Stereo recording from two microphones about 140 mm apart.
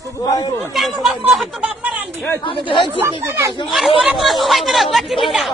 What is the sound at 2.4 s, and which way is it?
Chatter, 35° left (ahead or behind).